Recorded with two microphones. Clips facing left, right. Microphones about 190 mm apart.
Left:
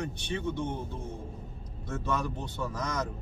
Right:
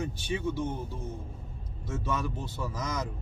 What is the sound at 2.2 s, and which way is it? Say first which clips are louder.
Speech: even; 5° right (ahead or behind).